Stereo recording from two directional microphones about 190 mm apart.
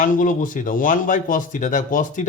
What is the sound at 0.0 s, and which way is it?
Speech, 45° left (ahead or behind).